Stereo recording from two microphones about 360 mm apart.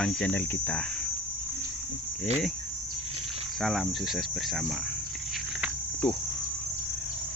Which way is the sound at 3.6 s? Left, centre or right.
Centre.